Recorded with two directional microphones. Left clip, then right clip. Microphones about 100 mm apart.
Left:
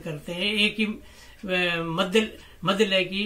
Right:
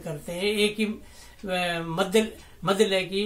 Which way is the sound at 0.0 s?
35° right (ahead or behind).